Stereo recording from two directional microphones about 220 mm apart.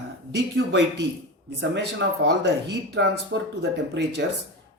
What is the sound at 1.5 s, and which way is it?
Speech, 50° right (ahead or behind).